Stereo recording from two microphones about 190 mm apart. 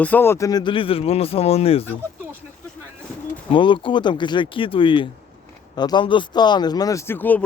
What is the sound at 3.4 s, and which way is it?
Speech, 25° left (ahead or behind).